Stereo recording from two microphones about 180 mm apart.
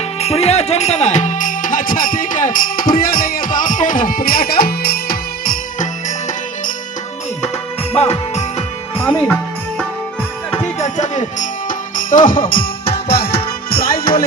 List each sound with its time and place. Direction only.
0.2 s music: 35° left (ahead or behind); by 5.5 s 60° left (ahead or behind)
7.9 s music: 35° left (ahead or behind)
9.0 s music: 10° left (ahead or behind)
10.6 s music: 40° left (ahead or behind); by 14.3 s 55° left (ahead or behind)